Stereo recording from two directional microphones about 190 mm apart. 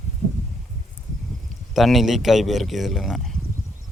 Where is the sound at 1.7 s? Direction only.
Centre (ahead or behind).